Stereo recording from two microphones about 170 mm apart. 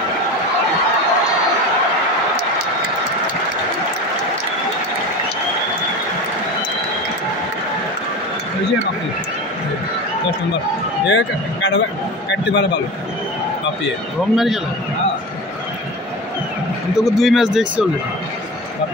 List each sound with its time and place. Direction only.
11.1 s a man's voice: 90° left
14.3 s speech: centre (ahead or behind)
16.9 s speech: centre (ahead or behind)